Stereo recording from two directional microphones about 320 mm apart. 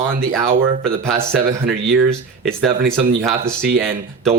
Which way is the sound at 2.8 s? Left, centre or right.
Right.